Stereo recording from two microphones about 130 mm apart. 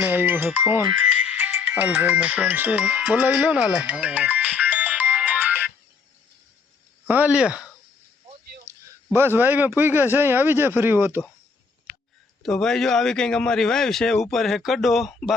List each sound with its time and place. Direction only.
0.0 s speech: 15° right (ahead or behind)
7.1 s speech: 10° right (ahead or behind)
9.1 s speech: 15° right (ahead or behind)
12.4 s speech: 5° left (ahead or behind)